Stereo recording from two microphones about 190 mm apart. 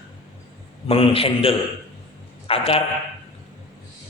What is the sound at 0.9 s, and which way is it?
A man's voice, 30° left (ahead or behind).